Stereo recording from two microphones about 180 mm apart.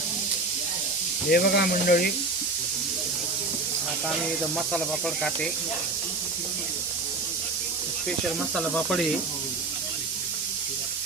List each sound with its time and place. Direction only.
1.3 s speech: 60° left (ahead or behind)
4.7 s speech: 5° left (ahead or behind)
8.5 s speech: 5° left (ahead or behind)